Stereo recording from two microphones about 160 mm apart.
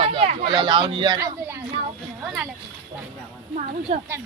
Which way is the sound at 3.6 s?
40° right (ahead or behind).